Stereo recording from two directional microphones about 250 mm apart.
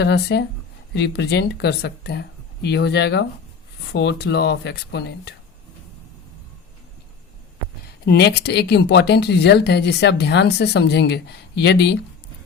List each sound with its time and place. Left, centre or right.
0.0 s speech: left
8.0 s speech: left